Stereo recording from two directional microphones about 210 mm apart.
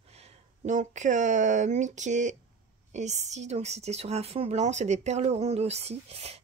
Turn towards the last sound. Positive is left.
turn(degrees=-30)  # may be behind; listen again after turning